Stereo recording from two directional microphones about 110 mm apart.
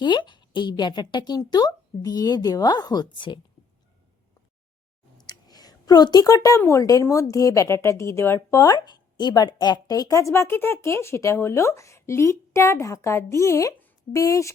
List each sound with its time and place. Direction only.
0.0 s a woman's voice: 45° left (ahead or behind)
5.1 s a sound: 35° left (ahead or behind)
6.6 s speech: 25° left (ahead or behind)